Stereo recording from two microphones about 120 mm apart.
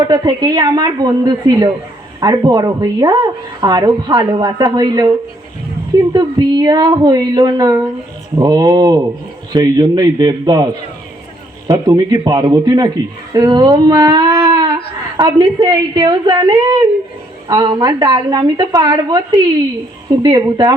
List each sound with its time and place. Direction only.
0.0 s speech: 35° right (ahead or behind)
6.1 s speech: 35° right (ahead or behind)
11.7 s speech: 30° right (ahead or behind)